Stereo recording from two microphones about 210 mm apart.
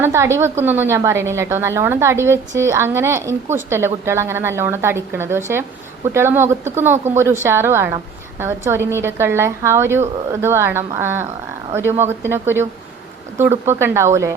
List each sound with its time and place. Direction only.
0.0 s a woman's voice: 10° right (ahead or behind)